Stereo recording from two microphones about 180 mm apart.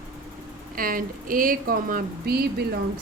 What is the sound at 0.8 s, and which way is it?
Speech, 50° right (ahead or behind).